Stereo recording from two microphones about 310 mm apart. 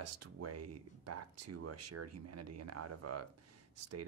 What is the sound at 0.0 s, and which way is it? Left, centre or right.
Speech, right.